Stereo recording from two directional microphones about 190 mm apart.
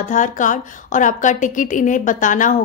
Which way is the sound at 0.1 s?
40° left (ahead or behind).